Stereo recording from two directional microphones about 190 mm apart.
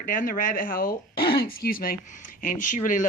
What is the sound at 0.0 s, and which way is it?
Speech, 45° left (ahead or behind).